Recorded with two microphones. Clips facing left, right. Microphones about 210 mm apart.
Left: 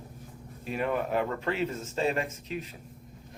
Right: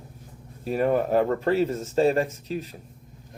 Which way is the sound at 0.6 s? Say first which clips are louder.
Right 7 dB; 40° right (ahead or behind).